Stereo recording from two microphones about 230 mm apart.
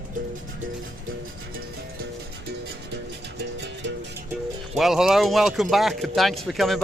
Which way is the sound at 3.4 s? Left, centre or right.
Right.